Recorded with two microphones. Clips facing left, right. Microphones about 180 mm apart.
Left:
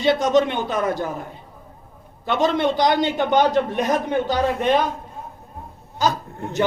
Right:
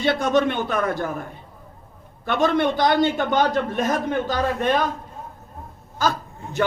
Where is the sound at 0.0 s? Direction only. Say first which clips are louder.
Left 2 dB; 20° left (ahead or behind).